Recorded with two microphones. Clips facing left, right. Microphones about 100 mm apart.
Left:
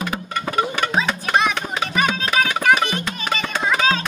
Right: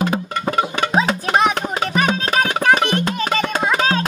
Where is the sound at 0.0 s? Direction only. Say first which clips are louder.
Right 5 dB; 30° right (ahead or behind).